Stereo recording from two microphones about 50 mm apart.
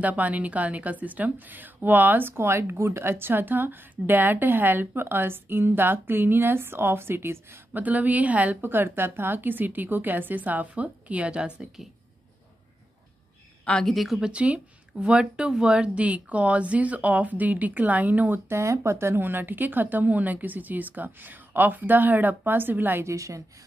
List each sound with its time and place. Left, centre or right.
0.0 s a woman's voice: right
2.3 s a woman's voice: right
7.7 s a woman's voice: right; by 11.8 s centre
13.8 s a woman's voice: centre
14.2 s speech: right
18.5 s a woman's voice: right
23.0 s speech: right